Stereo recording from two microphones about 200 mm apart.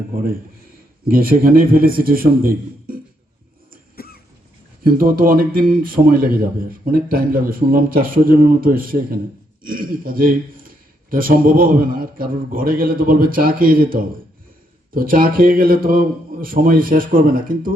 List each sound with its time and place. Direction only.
1.0 s speech: 45° right (ahead or behind)
3.9 s cough: 50° left (ahead or behind)
4.8 s speech: 45° right (ahead or behind)